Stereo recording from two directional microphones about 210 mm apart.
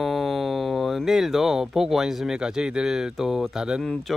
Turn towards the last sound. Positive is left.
turn(degrees=0)  # may be behind; listen again after turning